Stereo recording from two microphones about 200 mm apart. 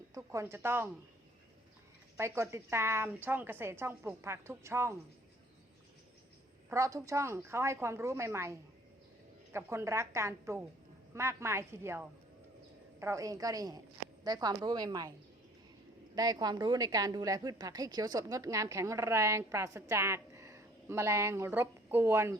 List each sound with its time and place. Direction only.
0.1 s a woman's voice: 15° right (ahead or behind)
2.1 s a woman's voice: 15° right (ahead or behind)
6.7 s a woman's voice: 15° right (ahead or behind)
16.1 s a woman's voice: 20° right (ahead or behind)